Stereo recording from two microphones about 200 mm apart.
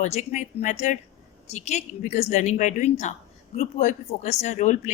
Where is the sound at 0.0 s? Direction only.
35° left (ahead or behind).